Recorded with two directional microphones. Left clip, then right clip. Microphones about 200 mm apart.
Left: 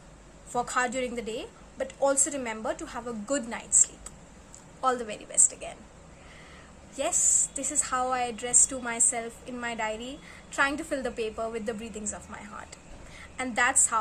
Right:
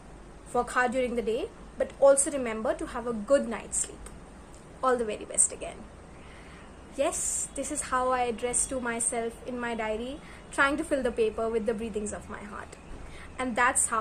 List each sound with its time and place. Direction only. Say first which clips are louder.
0.5 s a woman's voice: right 2 dB; 10° left (ahead or behind)
6.9 s a woman's voice: left 2 dB; 5° left (ahead or behind)